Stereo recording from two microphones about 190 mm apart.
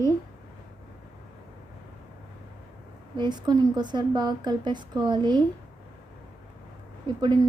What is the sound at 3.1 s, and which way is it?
A woman's voice, 25° right (ahead or behind).